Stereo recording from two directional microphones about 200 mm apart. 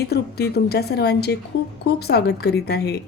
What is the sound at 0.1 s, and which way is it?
A woman's voice, 55° left (ahead or behind).